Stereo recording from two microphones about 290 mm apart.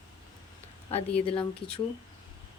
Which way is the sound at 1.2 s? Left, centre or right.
Centre.